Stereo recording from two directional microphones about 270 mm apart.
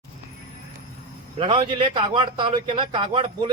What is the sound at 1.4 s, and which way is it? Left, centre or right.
A man's voice, centre.